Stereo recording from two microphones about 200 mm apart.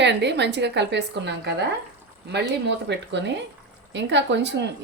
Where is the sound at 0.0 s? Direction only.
60° right (ahead or behind).